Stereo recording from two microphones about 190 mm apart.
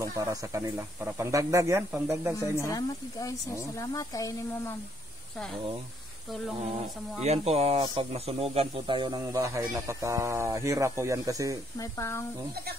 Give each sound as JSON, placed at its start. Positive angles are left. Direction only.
{"t": 0.2, "sound": "speech", "side_deg": -15}
{"t": 2.5, "sound": "speech", "side_deg": 15}
{"t": 7.2, "sound": "speech", "side_deg": -35}
{"t": 11.8, "sound": "speech", "side_deg": 15}